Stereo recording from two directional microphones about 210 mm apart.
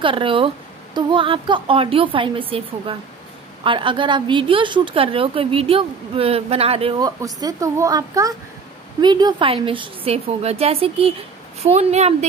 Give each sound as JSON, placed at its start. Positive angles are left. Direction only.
{"t": 0.0, "sound": "a woman's voice", "side_deg": -25}